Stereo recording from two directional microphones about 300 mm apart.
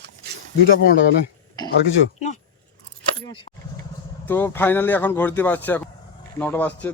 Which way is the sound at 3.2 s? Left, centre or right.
Centre.